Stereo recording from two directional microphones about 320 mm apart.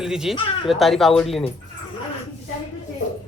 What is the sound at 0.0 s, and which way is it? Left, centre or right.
Speech, centre.